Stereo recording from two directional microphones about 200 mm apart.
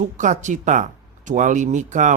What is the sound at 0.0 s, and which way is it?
Speech, 35° right (ahead or behind).